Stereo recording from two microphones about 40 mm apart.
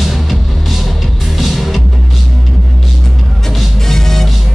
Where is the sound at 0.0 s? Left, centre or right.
Centre.